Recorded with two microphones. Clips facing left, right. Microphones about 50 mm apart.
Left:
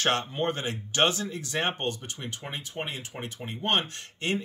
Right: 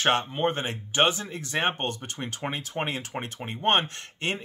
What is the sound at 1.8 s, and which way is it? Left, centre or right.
Speech, right.